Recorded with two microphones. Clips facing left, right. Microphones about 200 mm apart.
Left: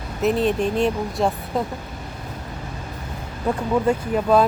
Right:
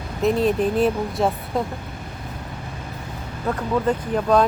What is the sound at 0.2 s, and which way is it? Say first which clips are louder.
Speech: right 1 dB; centre (ahead or behind).